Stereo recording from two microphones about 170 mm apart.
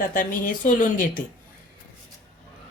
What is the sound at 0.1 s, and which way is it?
Speech, 50° left (ahead or behind).